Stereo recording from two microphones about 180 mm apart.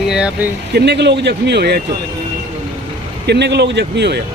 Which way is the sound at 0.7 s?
70° right (ahead or behind).